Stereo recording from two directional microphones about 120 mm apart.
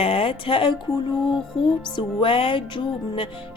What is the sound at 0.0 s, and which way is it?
Speech, 50° left (ahead or behind).